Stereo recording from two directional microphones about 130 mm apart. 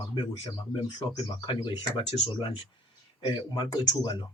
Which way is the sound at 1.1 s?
40° left (ahead or behind).